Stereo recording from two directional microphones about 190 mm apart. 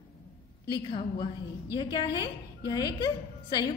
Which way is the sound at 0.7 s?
25° left (ahead or behind).